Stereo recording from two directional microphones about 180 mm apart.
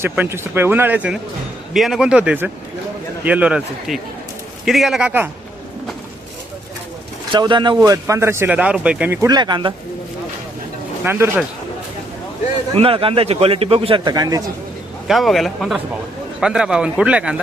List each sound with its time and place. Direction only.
0.0 s speech: 15° right (ahead or behind)
7.3 s speech: 25° right (ahead or behind); by 9.1 s 5° right (ahead or behind)
9.2 s speech: 25° right (ahead or behind)
11.0 s speech: 10° right (ahead or behind)
12.7 s a man's voice: 30° right (ahead or behind)
15.0 s speech: centre (ahead or behind)